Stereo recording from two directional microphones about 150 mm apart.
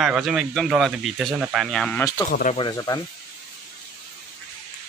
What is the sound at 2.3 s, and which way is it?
Speech, 65° left (ahead or behind).